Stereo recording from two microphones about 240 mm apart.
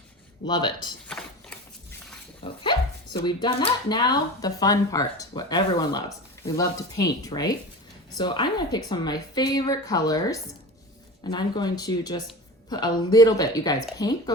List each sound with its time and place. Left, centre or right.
0.4 s speech: centre
1.0 s mechanisms: centre
2.4 s speech: centre